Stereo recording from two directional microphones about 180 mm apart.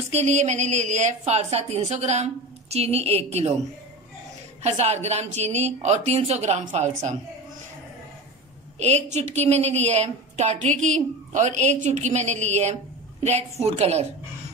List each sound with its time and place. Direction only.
0.1 s a woman's voice: 40° right (ahead or behind)
4.6 s a woman's voice: 40° right (ahead or behind)
9.1 s a woman's voice: 40° right (ahead or behind)